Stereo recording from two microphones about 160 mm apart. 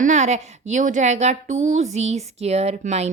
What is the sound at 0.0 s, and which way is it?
A woman's voice, 50° right (ahead or behind).